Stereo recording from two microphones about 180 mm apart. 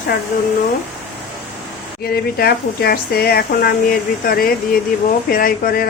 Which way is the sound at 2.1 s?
60° left (ahead or behind).